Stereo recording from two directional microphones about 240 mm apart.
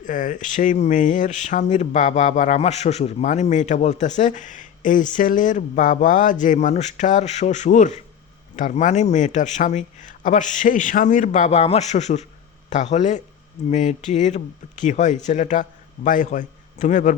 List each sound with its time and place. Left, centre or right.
0.0 s a man's voice: left